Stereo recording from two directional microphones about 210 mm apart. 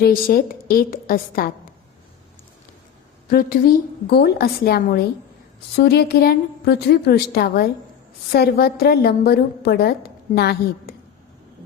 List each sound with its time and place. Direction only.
0.0 s a woman's voice: 45° left (ahead or behind)
3.2 s a woman's voice: 40° left (ahead or behind)